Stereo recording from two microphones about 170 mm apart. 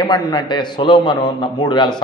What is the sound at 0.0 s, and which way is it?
A man's voice, 25° left (ahead or behind).